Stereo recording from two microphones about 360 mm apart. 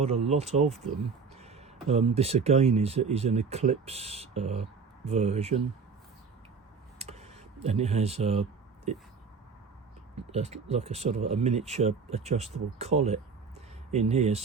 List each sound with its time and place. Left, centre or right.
0.0 s speech: centre
7.0 s a sound: centre
10.2 s speech: centre